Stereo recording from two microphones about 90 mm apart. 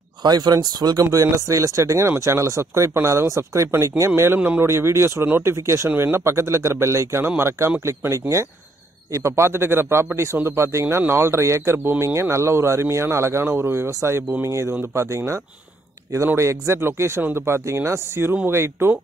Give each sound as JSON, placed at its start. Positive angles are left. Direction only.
{"t": 0.2, "sound": "a man's voice", "side_deg": -50}